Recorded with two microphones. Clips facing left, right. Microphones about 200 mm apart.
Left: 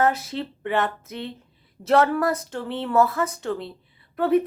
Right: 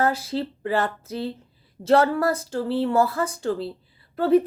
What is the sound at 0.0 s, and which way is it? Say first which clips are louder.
Speech: even; 30° right (ahead or behind).